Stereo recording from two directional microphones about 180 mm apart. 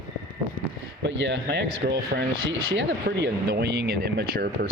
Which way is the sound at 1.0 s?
85° right.